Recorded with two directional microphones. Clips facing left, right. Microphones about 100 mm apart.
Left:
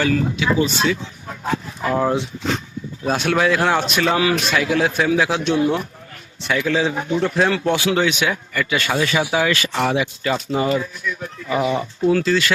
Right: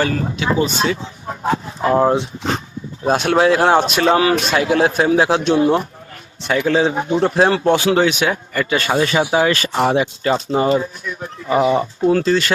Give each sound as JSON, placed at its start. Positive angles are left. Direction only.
{"t": 0.0, "sound": "speech", "side_deg": -35}